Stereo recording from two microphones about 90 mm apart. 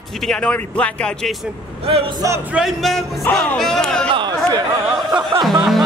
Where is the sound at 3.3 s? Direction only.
20° left (ahead or behind).